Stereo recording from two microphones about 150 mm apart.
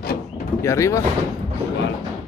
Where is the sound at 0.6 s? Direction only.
20° left (ahead or behind).